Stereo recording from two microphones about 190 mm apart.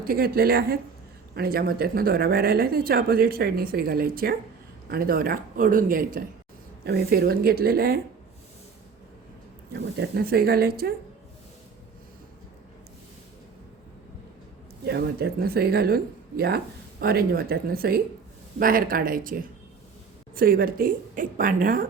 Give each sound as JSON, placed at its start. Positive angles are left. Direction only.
{"t": 0.0, "sound": "speech", "side_deg": -50}
{"t": 9.7, "sound": "speech", "side_deg": -55}
{"t": 14.8, "sound": "speech", "side_deg": -60}
{"t": 17.0, "sound": "speech", "side_deg": -55}